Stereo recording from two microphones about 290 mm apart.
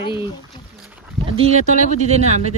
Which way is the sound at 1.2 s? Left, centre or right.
Centre.